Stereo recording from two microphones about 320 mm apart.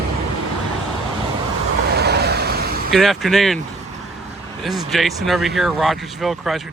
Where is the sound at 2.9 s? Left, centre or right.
Centre.